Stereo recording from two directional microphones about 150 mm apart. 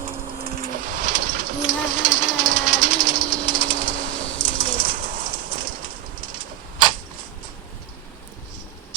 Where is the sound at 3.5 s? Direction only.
60° right (ahead or behind).